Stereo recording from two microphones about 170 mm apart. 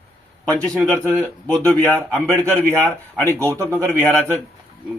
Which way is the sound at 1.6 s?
10° left (ahead or behind).